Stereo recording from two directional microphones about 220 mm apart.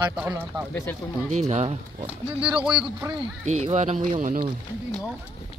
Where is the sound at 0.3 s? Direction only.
10° right (ahead or behind).